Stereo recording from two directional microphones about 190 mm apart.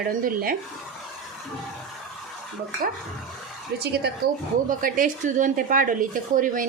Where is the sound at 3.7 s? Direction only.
60° right (ahead or behind).